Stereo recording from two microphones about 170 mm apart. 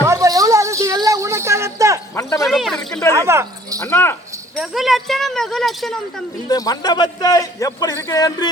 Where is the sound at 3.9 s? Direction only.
10° left (ahead or behind).